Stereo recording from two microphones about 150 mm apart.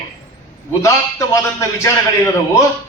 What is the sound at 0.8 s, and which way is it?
A man's voice, 20° left (ahead or behind).